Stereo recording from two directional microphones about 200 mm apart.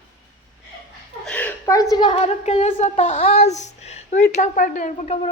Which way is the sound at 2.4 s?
35° left (ahead or behind).